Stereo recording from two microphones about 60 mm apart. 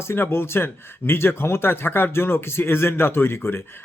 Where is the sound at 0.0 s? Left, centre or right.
Left.